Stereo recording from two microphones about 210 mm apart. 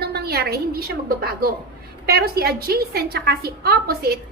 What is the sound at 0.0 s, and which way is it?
A woman's voice, 50° right (ahead or behind).